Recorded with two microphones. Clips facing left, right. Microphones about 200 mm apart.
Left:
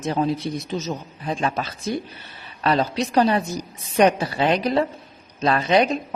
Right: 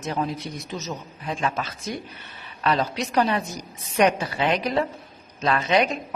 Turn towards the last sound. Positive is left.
turn(degrees=35)  # may be behind; listen again after turning